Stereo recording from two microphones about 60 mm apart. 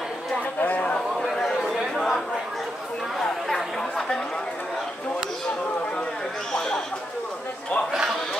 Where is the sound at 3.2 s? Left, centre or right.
Centre.